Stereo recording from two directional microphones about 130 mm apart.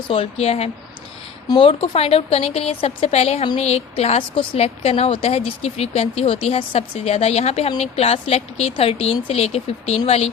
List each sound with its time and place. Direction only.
0.1 s speech: 45° left (ahead or behind)